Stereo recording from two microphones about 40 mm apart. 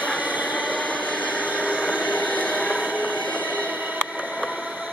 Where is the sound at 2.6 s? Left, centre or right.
Right.